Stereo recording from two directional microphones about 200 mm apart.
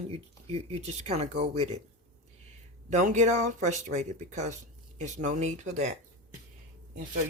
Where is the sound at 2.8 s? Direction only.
40° right (ahead or behind).